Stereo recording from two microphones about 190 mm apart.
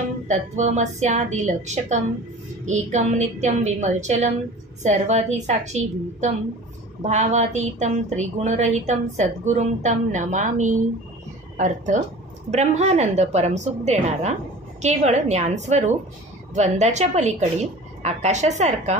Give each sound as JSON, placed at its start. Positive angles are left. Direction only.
{"t": 0.3, "sound": "speech", "side_deg": -40}